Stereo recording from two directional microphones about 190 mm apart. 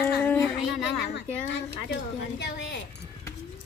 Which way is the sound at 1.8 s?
65° left (ahead or behind).